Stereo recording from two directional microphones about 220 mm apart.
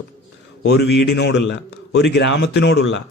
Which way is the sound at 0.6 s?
50° left (ahead or behind).